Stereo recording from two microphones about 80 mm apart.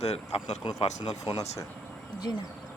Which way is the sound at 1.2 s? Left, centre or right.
Left.